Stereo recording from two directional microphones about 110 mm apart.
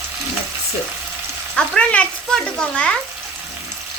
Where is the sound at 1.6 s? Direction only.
10° left (ahead or behind).